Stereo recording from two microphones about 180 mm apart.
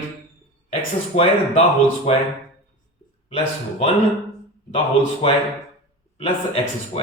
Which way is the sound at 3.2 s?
30° left (ahead or behind).